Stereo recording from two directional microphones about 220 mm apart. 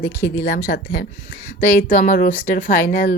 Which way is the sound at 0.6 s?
45° left (ahead or behind).